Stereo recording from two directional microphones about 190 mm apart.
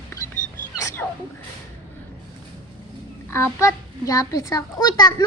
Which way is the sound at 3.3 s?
15° left (ahead or behind).